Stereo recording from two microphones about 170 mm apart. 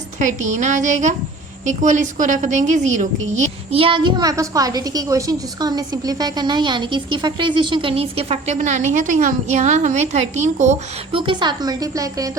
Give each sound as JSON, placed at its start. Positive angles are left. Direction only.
{"t": 0.2, "sound": "a woman's voice", "side_deg": -45}
{"t": 11.2, "sound": "a woman's voice", "side_deg": -25}